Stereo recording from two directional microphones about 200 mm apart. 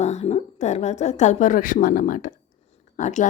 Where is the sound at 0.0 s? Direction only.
35° left (ahead or behind).